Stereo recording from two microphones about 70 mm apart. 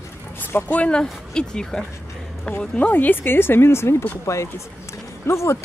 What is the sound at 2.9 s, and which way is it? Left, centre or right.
Speech, left.